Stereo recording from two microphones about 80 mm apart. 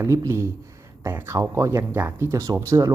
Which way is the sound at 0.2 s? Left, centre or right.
Right.